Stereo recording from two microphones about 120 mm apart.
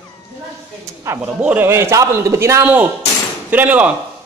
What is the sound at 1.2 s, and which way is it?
A man's voice, 10° right (ahead or behind).